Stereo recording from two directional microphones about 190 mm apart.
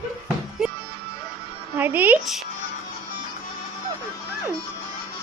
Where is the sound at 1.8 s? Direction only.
10° right (ahead or behind).